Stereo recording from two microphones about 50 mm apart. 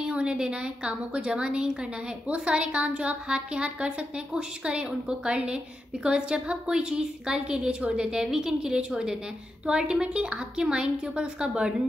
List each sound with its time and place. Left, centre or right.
0.0 s a woman's voice: right